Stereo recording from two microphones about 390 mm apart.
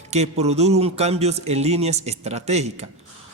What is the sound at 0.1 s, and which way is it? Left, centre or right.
A man's voice, centre.